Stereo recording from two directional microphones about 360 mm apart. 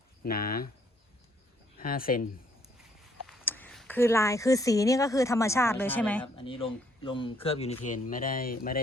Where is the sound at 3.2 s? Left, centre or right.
Centre.